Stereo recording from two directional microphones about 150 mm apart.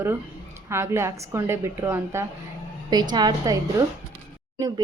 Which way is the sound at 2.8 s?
30° right (ahead or behind).